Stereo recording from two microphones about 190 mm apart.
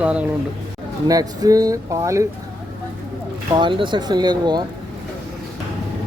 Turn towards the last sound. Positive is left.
turn(degrees=-20)  # may be behind; listen again after turning